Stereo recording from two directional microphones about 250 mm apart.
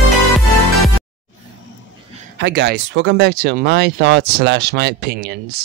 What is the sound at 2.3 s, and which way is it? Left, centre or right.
Speech, right.